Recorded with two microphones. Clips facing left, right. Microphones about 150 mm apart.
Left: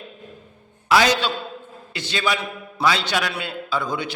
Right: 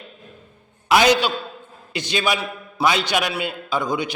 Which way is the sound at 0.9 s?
20° right (ahead or behind).